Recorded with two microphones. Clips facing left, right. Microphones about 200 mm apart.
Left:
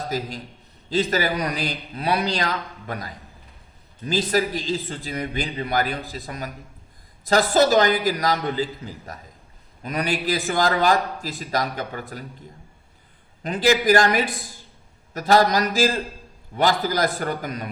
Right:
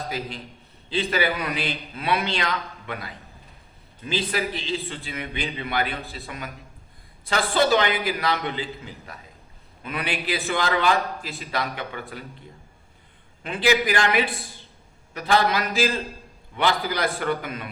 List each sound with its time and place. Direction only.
0.1 s a man's voice: 40° left (ahead or behind)
13.4 s a man's voice: 40° left (ahead or behind)